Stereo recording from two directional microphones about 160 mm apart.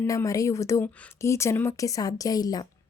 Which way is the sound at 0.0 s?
15° left (ahead or behind).